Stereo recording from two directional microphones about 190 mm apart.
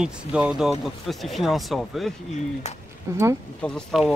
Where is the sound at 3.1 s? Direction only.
15° right (ahead or behind).